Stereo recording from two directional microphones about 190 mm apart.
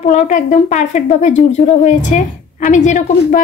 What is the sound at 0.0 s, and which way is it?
A woman's voice, 40° left (ahead or behind).